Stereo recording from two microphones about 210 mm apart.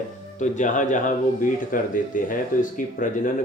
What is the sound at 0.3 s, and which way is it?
Speech, 35° left (ahead or behind).